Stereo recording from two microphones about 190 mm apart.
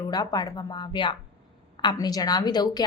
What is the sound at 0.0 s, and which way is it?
A woman's voice, 20° left (ahead or behind).